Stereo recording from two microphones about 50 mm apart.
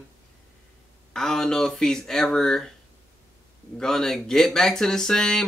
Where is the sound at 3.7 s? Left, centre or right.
Centre.